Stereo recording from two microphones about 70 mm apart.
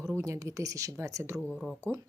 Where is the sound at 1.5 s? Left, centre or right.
Centre.